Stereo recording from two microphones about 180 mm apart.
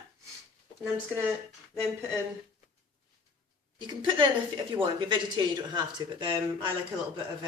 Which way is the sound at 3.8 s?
25° right (ahead or behind).